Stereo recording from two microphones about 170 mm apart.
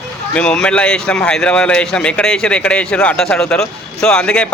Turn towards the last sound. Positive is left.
turn(degrees=5)  # may be behind; listen again after turning